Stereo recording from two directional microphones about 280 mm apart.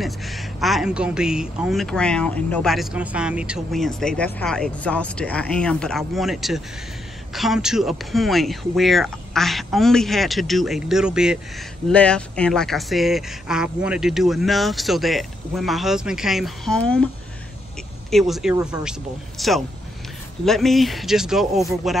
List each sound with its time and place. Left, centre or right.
0.0 s a man's voice: centre
18.1 s a man's voice: centre